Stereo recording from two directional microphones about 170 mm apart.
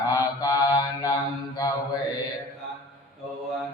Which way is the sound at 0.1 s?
20° left (ahead or behind).